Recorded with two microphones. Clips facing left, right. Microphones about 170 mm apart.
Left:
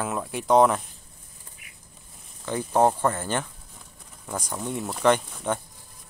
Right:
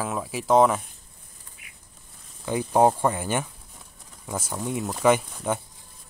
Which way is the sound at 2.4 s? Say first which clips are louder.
Right 2 dB; 10° right (ahead or behind).